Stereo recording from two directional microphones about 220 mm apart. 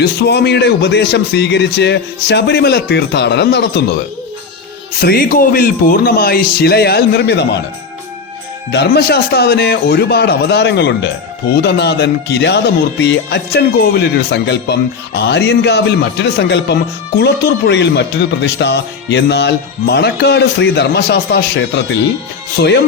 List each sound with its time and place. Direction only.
0.0 s speech: 50° left (ahead or behind)
4.9 s speech: 45° left (ahead or behind)
8.7 s speech: 50° left (ahead or behind)